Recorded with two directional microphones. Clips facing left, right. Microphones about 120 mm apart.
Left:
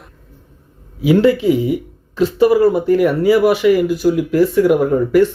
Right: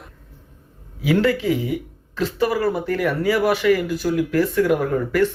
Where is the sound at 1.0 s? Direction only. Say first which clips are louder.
Left 6 dB; 15° left (ahead or behind).